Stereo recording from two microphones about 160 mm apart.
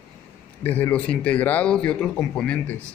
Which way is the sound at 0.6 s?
10° left (ahead or behind).